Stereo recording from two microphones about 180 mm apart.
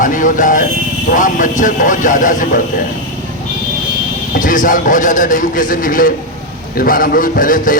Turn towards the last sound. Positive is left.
turn(degrees=50)  # may be behind; listen again after turning